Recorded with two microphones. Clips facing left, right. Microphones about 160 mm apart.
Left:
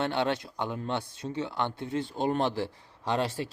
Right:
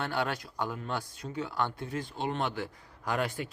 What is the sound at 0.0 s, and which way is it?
Speech, 25° left (ahead or behind).